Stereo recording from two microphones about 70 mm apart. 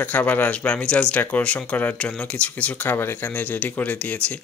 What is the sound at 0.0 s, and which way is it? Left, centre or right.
Speech, left.